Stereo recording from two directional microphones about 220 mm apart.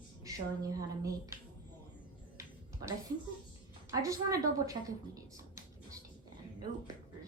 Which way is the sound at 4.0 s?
15° right (ahead or behind).